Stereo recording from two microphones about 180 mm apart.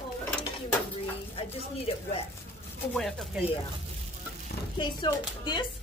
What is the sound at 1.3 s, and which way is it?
Speech, 35° left (ahead or behind).